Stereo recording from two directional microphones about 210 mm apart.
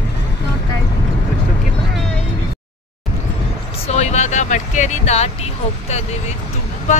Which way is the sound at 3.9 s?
30° left (ahead or behind).